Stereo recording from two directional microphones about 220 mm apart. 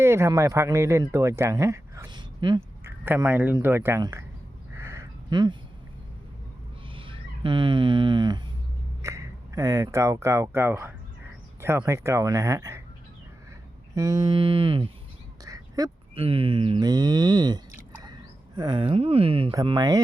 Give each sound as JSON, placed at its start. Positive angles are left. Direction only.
{"t": 0.0, "sound": "speech", "side_deg": -10}
{"t": 1.1, "sound": "a sound", "side_deg": -10}
{"t": 3.0, "sound": "speech", "side_deg": -10}
{"t": 4.7, "sound": "a sound", "side_deg": -10}
{"t": 6.9, "sound": "speech", "side_deg": -25}
{"t": 13.9, "sound": "mantra", "side_deg": -15}
{"t": 15.4, "sound": "speech", "side_deg": -15}